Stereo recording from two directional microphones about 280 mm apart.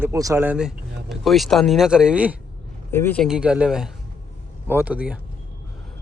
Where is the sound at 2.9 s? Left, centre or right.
Centre.